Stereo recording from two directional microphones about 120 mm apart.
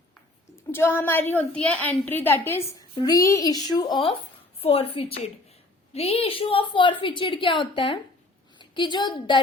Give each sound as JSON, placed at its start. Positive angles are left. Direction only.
{"t": 0.7, "sound": "a woman's voice", "side_deg": 20}
{"t": 4.6, "sound": "a woman's voice", "side_deg": 55}